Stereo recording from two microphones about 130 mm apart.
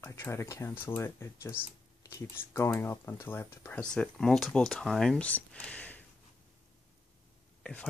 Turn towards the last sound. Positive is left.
turn(degrees=10)  # may be behind; listen again after turning